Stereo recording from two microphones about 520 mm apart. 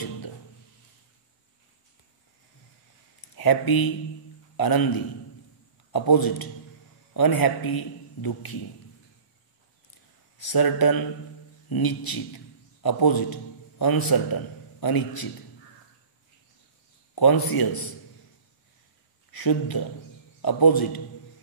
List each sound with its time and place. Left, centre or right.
3.3 s a man's voice: left
10.4 s a man's voice: left
17.1 s speech: left
19.3 s a man's voice: left